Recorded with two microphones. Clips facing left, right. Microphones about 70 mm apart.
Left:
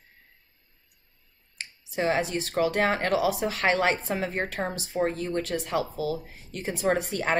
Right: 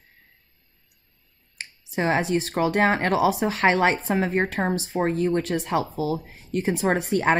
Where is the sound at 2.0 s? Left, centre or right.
Right.